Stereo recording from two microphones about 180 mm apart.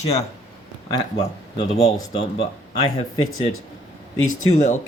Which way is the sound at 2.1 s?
35° left (ahead or behind).